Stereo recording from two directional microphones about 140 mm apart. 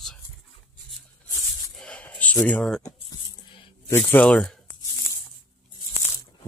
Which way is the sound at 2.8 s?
30° left (ahead or behind).